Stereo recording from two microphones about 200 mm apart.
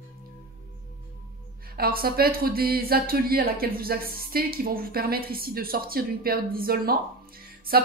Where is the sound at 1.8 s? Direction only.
50° right (ahead or behind).